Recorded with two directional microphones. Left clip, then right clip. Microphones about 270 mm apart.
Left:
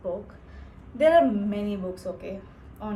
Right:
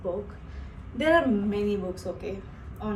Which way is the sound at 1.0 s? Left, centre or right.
Centre.